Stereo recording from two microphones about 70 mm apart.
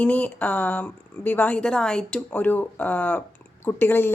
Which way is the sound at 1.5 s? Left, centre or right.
Centre.